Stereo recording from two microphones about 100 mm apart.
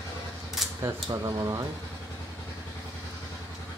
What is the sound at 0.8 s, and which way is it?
Speech, 40° right (ahead or behind).